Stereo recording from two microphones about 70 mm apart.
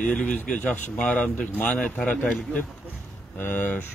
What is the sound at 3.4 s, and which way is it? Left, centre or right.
Speech, left.